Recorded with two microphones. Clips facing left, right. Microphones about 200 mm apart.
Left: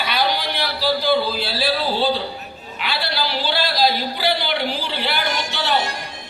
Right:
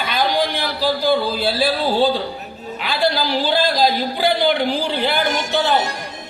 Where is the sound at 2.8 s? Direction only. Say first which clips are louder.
Right 5 dB; 45° right (ahead or behind).